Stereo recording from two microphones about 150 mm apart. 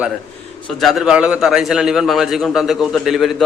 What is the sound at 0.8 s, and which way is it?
A man's voice, centre (ahead or behind).